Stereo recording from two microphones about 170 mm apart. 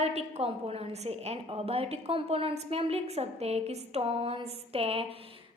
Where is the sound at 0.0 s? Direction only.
40° right (ahead or behind).